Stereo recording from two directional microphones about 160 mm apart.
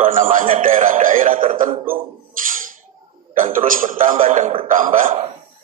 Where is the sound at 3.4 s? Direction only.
60° right (ahead or behind).